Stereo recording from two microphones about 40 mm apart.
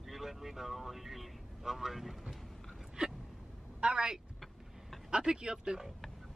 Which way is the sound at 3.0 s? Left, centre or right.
Right.